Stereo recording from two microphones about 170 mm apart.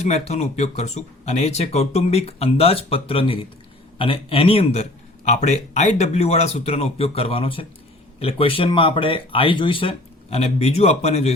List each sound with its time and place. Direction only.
0.0 s a man's voice: 40° left (ahead or behind)